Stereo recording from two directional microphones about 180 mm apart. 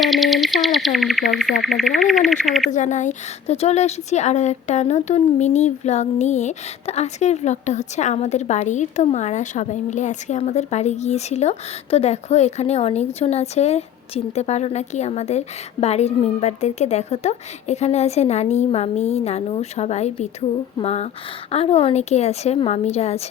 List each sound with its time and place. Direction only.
0.0 s insect: centre (ahead or behind)
2.6 s a woman's voice: 45° left (ahead or behind)